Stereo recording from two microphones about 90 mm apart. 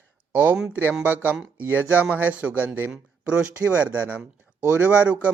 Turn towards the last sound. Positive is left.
turn(degrees=-15)  # may be behind; listen again after turning